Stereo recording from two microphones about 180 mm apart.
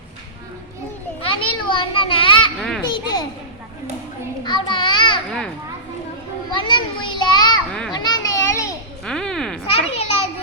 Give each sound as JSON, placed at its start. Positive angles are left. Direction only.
{"t": 1.2, "sound": "children playing", "side_deg": 30}
{"t": 2.6, "sound": "children playing", "side_deg": 0}
{"t": 2.9, "sound": "a sound", "side_deg": 25}
{"t": 4.4, "sound": "a sound", "side_deg": 25}
{"t": 6.5, "sound": "children playing", "side_deg": 25}
{"t": 7.7, "sound": "children playing", "side_deg": 5}
{"t": 7.9, "sound": "children playing", "side_deg": 20}
{"t": 9.0, "sound": "a sound", "side_deg": 5}
{"t": 9.6, "sound": "children playing", "side_deg": 35}